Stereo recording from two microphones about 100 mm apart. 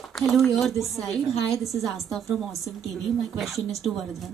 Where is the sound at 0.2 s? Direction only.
Centre (ahead or behind).